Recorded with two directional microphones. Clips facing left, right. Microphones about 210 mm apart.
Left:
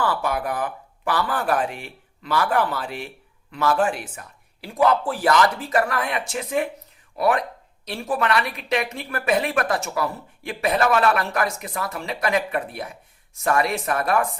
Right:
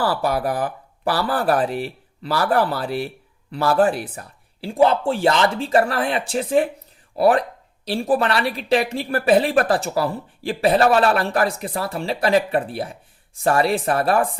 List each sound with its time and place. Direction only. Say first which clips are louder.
0.0 s speech: right 3 dB; 35° right (ahead or behind)